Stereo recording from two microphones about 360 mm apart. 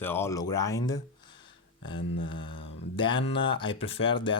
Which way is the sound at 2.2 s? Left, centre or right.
Centre.